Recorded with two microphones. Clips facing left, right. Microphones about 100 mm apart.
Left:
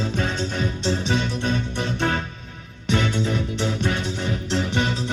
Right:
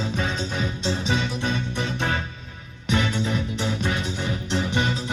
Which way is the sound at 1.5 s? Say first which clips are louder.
Left 2 dB; 45° left (ahead or behind).